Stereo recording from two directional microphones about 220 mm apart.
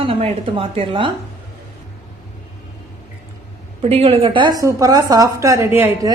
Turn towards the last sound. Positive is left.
turn(degrees=-10)  # may be behind; listen again after turning